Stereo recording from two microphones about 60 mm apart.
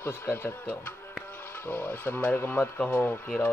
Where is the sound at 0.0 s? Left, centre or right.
Left.